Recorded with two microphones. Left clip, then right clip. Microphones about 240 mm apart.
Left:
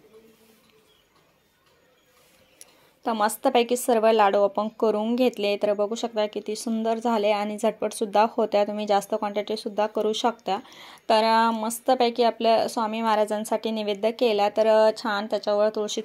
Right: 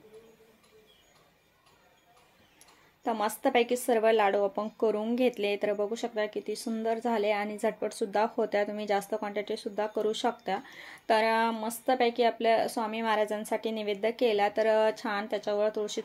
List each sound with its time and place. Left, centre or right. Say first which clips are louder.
3.0 s speech: left 6 dB; left